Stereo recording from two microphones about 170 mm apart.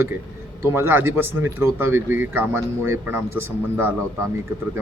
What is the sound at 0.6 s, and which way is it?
Speech, 15° right (ahead or behind).